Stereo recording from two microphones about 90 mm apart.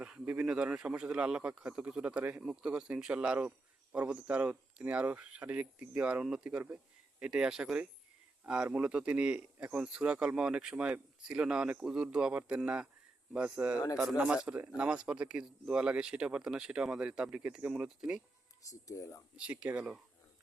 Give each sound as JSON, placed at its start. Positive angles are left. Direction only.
{"t": 0.0, "sound": "speech", "side_deg": -10}
{"t": 18.6, "sound": "speech", "side_deg": 40}
{"t": 19.4, "sound": "speech", "side_deg": -15}